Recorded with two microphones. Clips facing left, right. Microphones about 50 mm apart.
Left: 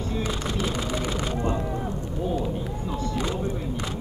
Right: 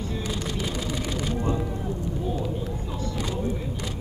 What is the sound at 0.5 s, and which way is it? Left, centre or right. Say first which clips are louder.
Music: left 2 dB; left.